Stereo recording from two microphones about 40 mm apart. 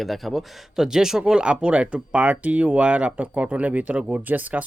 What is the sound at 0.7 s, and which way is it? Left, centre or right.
Speech, centre.